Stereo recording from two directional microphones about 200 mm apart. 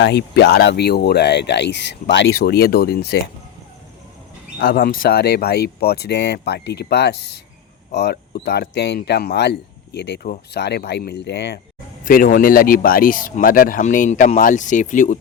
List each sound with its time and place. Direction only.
0.0 s speech: 55° left (ahead or behind)
4.6 s speech: 50° left (ahead or behind)
12.0 s speech: 45° left (ahead or behind)